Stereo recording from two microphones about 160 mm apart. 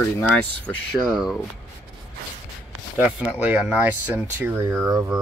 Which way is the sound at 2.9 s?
10° right (ahead or behind).